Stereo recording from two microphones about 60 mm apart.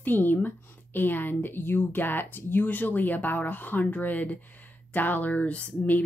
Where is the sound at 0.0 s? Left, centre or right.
Left.